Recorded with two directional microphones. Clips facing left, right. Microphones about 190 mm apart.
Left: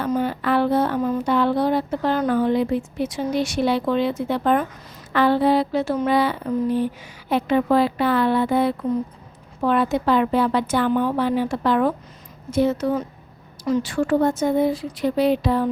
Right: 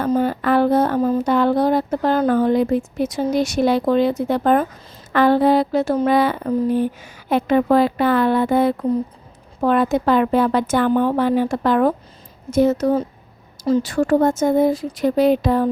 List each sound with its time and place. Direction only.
0.2 s speech: 45° right (ahead or behind)